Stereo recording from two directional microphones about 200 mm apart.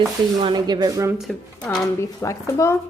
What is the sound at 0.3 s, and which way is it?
Speech, 20° right (ahead or behind).